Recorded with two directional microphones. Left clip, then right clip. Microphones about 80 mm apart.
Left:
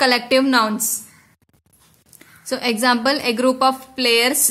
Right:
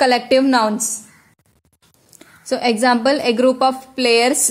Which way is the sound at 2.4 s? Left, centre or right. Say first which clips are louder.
Right 3 dB; right.